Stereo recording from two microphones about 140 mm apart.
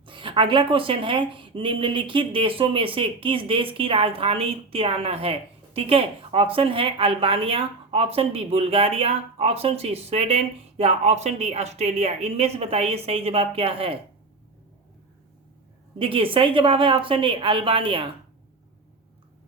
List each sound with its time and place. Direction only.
0.0 s speech: 35° right (ahead or behind)
16.0 s speech: 40° right (ahead or behind)